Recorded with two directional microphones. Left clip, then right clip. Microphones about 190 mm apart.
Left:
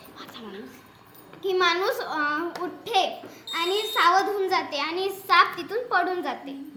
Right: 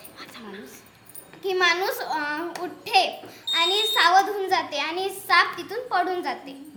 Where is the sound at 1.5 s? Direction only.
5° right (ahead or behind).